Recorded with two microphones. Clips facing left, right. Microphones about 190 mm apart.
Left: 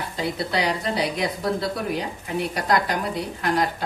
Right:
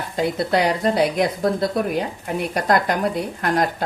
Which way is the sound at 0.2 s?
50° right (ahead or behind).